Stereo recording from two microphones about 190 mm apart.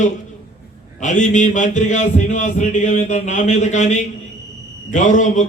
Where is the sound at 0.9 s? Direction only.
40° left (ahead or behind).